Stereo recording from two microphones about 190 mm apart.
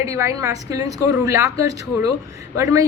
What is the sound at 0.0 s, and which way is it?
A woman's voice, 15° right (ahead or behind).